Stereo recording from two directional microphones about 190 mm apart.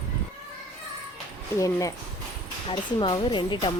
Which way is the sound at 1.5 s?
15° left (ahead or behind).